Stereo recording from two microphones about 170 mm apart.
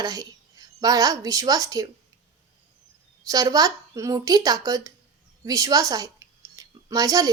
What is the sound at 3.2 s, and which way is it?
A woman's voice, 20° right (ahead or behind).